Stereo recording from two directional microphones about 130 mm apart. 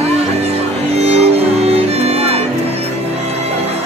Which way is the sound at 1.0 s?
55° right (ahead or behind).